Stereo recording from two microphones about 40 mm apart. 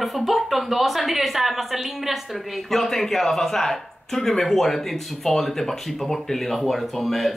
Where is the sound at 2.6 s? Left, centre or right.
Centre.